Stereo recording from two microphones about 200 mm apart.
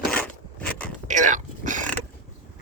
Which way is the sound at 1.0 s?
40° right (ahead or behind).